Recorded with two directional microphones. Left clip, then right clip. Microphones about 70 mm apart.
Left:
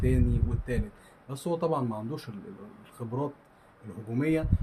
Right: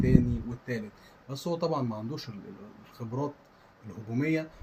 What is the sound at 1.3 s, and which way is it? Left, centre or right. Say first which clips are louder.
Speech: left 1 dB; left.